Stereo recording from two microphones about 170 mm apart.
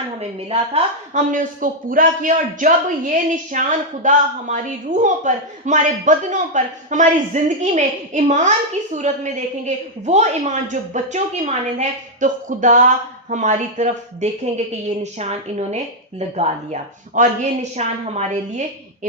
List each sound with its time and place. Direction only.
0.2 s speech: 35° right (ahead or behind)
1.3 s a man's voice: 50° right (ahead or behind)